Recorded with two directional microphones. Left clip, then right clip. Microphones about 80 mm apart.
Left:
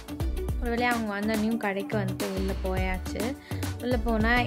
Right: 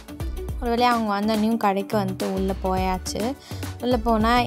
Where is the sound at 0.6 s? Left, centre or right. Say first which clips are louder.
Right 7 dB; right.